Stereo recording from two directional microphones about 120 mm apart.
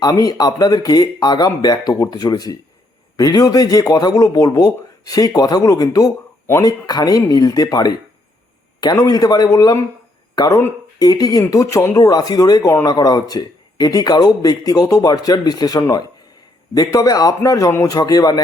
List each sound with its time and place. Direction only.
0.0 s a man's voice: 30° left (ahead or behind)